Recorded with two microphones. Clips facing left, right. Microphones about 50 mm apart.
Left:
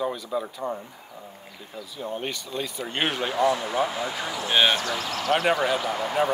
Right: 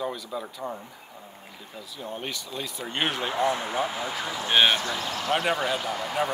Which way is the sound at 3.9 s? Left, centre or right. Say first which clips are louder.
Left 1 dB; centre.